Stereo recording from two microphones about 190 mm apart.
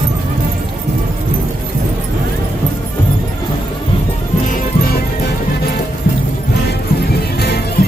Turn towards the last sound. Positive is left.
turn(degrees=60)  # may be behind; listen again after turning